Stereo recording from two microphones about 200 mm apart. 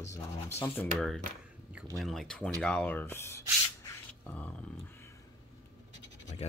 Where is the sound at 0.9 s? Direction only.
Centre (ahead or behind).